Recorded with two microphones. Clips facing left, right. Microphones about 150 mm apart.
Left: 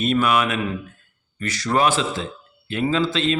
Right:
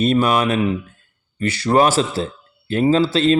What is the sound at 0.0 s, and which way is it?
A man's voice, 35° right (ahead or behind).